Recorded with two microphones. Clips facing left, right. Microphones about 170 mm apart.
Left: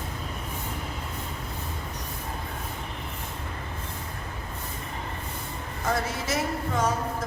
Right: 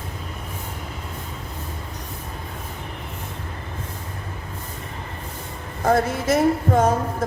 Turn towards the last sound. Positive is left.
turn(degrees=-50)  # may be behind; listen again after turning